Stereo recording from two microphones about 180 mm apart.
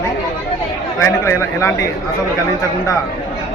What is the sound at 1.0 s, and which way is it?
Speech, 15° left (ahead or behind).